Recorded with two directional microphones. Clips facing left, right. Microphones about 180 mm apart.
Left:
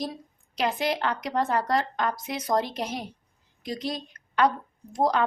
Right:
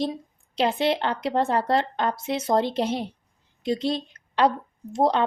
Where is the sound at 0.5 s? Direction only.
30° right (ahead or behind).